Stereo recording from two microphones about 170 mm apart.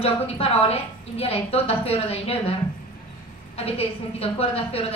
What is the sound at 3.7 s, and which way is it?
A woman's voice, 35° left (ahead or behind).